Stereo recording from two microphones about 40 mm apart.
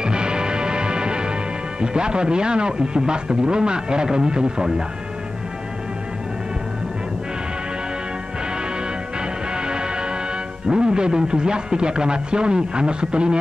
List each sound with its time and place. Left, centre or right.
0.0 s music: right
1.8 s speech: right
9.7 s music: right
10.7 s speech: right